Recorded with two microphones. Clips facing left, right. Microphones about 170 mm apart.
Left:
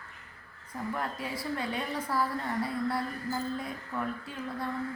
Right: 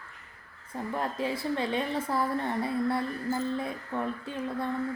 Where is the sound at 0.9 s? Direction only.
25° right (ahead or behind).